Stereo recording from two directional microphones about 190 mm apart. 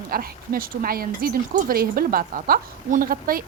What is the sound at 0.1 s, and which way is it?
Speech, 50° right (ahead or behind).